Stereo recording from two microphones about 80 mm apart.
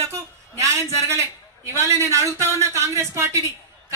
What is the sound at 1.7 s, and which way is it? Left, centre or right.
Speech, right.